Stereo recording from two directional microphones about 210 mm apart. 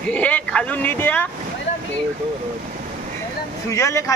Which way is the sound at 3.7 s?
15° left (ahead or behind).